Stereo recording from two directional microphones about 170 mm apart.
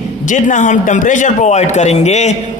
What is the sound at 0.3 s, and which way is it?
A man's voice, 45° left (ahead or behind).